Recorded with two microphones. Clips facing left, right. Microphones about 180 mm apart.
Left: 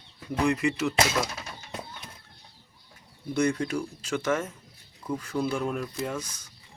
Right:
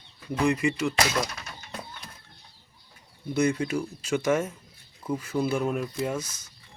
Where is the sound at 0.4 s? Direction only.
Centre (ahead or behind).